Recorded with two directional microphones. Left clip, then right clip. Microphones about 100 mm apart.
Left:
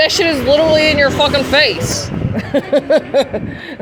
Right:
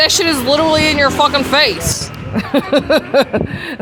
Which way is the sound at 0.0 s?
50° right (ahead or behind).